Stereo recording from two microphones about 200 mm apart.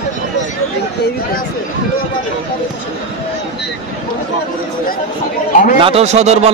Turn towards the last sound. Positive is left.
turn(degrees=-35)  # may be behind; listen again after turning